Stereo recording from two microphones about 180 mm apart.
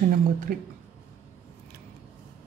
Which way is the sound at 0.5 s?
55° right (ahead or behind).